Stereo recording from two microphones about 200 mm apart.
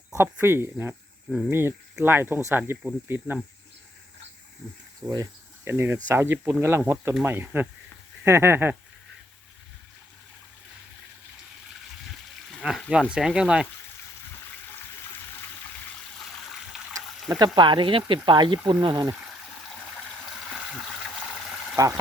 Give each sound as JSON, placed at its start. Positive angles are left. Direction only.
{"t": 0.1, "sound": "speech", "side_deg": -10}
{"t": 5.0, "sound": "speech", "side_deg": -15}
{"t": 12.5, "sound": "speech", "side_deg": 0}
{"t": 16.1, "sound": "water", "side_deg": 0}
{"t": 17.2, "sound": "speech", "side_deg": -20}
{"t": 21.8, "sound": "speech", "side_deg": -15}